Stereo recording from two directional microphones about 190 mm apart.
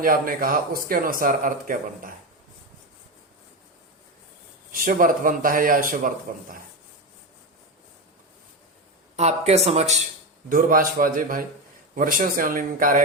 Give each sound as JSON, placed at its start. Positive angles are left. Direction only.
{"t": 0.0, "sound": "speech", "side_deg": -50}
{"t": 4.7, "sound": "speech", "side_deg": -45}
{"t": 9.1, "sound": "speech", "side_deg": -35}
{"t": 10.5, "sound": "speech", "side_deg": -50}